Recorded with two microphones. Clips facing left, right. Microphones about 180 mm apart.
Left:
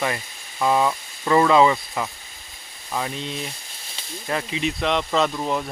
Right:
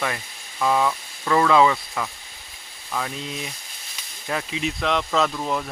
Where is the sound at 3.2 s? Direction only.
5° right (ahead or behind).